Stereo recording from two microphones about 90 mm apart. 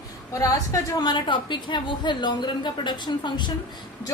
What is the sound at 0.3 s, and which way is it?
Speech, 35° left (ahead or behind).